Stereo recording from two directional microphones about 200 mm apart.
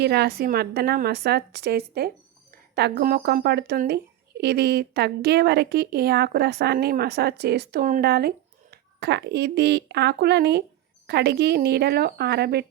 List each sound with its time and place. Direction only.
0.0 s speech: 55° right (ahead or behind)